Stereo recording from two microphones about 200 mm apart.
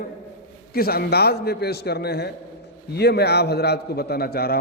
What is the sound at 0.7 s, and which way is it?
A man's voice, 50° left (ahead or behind).